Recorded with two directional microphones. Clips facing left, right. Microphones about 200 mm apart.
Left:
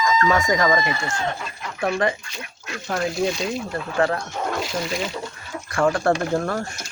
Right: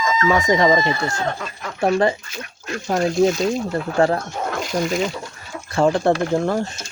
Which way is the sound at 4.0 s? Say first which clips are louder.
Right 4 dB; 25° right (ahead or behind).